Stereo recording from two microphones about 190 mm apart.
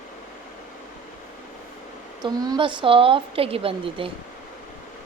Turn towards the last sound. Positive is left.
turn(degrees=-30)  # may be behind; listen again after turning